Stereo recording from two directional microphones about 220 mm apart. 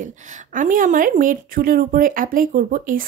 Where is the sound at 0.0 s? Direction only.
35° right (ahead or behind).